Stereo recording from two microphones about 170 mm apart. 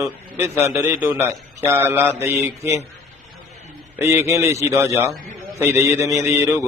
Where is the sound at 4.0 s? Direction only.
15° right (ahead or behind).